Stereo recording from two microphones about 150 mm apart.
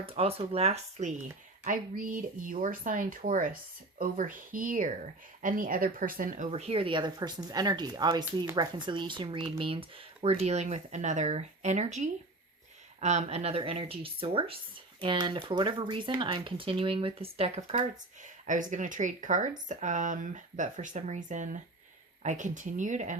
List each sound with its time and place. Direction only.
0.0 s speech: 40° right (ahead or behind)
1.6 s speech: 65° right (ahead or behind)
6.5 s speech: 40° right (ahead or behind)